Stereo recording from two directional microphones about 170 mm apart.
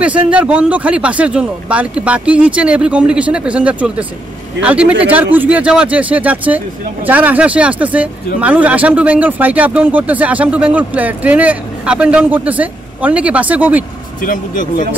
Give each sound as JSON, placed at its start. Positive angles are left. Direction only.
{"t": 0.0, "sound": "speech", "side_deg": -10}
{"t": 14.2, "sound": "speech", "side_deg": 55}